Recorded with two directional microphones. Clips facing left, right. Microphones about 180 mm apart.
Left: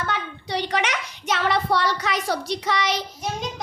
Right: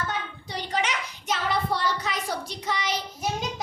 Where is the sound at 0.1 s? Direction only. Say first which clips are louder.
Left 5 dB; 80° left.